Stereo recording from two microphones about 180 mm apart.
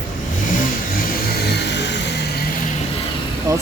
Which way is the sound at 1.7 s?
75° left (ahead or behind).